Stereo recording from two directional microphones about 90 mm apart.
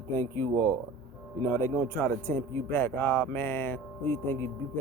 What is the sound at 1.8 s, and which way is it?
Speech, 20° left (ahead or behind).